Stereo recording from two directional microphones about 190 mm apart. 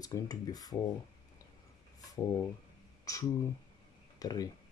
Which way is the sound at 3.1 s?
15° left (ahead or behind).